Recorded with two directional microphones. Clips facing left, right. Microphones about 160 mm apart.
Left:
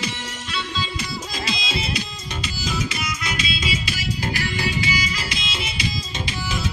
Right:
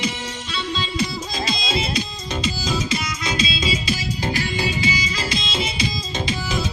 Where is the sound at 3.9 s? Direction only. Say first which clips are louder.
Right 2 dB; 20° right (ahead or behind).